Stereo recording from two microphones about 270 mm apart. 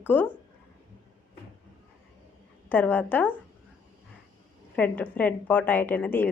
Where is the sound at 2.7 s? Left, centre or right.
Centre.